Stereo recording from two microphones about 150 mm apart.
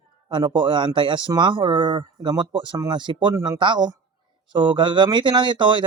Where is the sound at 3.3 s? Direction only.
20° right (ahead or behind).